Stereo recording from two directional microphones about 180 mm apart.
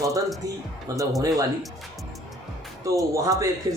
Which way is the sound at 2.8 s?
20° right (ahead or behind).